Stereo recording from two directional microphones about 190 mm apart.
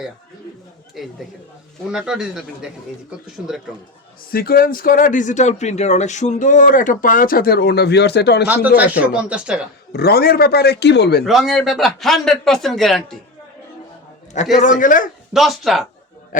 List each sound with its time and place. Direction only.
1.0 s a man's voice: centre (ahead or behind)
4.3 s speech: 50° left (ahead or behind)
8.4 s speech: 10° right (ahead or behind)
9.9 s a man's voice: 55° left (ahead or behind)
11.3 s a man's voice: centre (ahead or behind)
14.5 s speech: 40° left (ahead or behind)
15.3 s a man's voice: centre (ahead or behind)
16.3 s speech: 45° left (ahead or behind)